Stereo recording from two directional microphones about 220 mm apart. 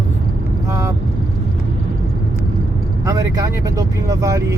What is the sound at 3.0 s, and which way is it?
Speech, 15° right (ahead or behind).